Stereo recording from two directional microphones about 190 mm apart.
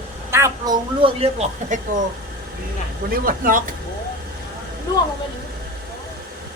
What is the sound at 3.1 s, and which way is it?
Speech, 50° right (ahead or behind).